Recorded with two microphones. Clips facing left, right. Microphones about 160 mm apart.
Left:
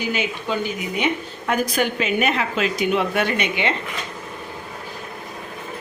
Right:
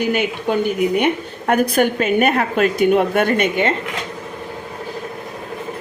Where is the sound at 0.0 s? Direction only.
55° right (ahead or behind).